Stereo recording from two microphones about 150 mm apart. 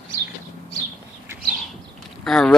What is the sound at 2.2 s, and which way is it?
Vehicle, 5° left (ahead or behind).